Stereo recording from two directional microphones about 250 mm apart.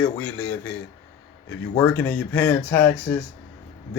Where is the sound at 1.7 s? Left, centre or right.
Centre.